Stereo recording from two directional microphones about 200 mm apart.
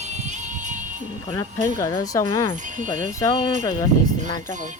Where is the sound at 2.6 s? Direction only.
40° right (ahead or behind).